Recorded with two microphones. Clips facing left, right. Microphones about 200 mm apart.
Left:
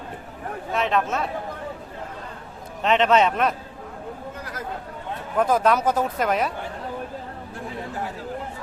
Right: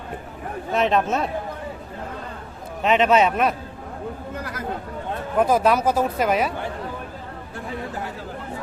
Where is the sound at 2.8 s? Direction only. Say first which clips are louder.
Right 1 dB; 10° right (ahead or behind).